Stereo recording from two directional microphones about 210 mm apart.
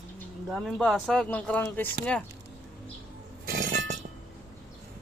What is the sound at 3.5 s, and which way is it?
Chink, 50° right (ahead or behind).